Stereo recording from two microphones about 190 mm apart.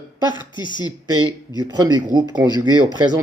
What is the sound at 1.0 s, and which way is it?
Speech, 20° right (ahead or behind).